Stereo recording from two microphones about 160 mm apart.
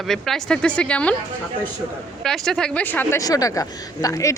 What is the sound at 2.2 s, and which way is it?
A woman's voice, 5° left (ahead or behind).